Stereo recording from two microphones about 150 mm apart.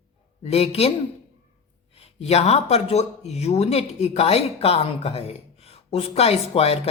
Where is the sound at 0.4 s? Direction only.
40° left (ahead or behind).